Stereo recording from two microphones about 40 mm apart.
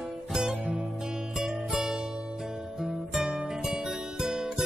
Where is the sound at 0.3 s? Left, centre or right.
Centre.